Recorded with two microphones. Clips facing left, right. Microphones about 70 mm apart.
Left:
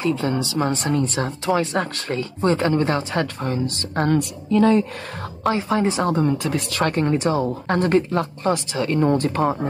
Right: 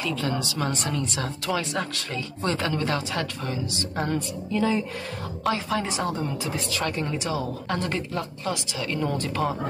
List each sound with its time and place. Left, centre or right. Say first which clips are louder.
0.0 s speech: left 6 dB; left
4.5 s a woman's voice: left 8 dB; left
5.5 s speech: left 6 dB; left
7.1 s speech: left 8 dB; left